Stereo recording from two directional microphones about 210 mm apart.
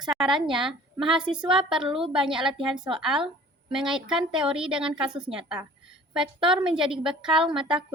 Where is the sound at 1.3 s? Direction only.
25° right (ahead or behind).